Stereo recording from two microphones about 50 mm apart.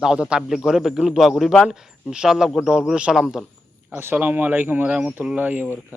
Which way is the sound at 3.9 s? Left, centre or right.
Right.